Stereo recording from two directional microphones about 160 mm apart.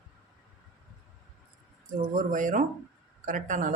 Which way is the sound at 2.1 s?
55° right (ahead or behind).